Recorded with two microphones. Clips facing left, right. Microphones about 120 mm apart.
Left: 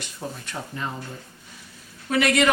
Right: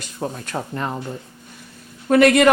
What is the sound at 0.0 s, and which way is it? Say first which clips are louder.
Speech: right 6 dB; 50° right (ahead or behind).